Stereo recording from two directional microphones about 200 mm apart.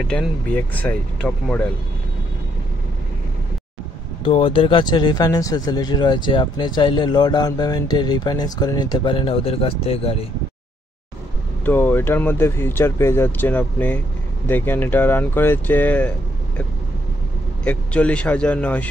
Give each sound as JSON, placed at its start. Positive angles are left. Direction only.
{"t": 0.1, "sound": "speech", "side_deg": 5}
{"t": 4.2, "sound": "speech", "side_deg": 25}
{"t": 11.6, "sound": "speech", "side_deg": 10}
{"t": 17.6, "sound": "speech", "side_deg": 5}